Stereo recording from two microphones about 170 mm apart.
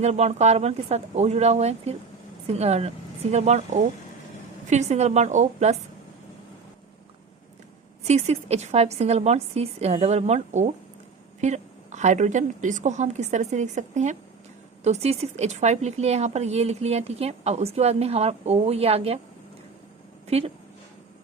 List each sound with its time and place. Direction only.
0.0 s a woman's voice: 40° right (ahead or behind)
8.0 s a woman's voice: 40° right (ahead or behind)